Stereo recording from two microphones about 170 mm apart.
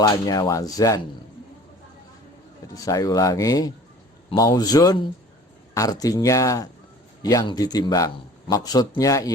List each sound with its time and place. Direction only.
0.0 s a man's voice: 20° left (ahead or behind)
2.7 s a man's voice: 20° left (ahead or behind)